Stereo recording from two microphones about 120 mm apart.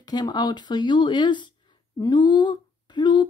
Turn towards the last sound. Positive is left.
turn(degrees=40)  # may be behind; listen again after turning